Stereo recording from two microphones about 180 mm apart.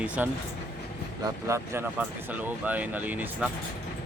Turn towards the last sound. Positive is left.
turn(degrees=-10)  # may be behind; listen again after turning